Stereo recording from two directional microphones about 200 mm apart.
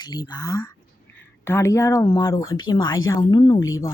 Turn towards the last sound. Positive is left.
turn(degrees=15)  # may be behind; listen again after turning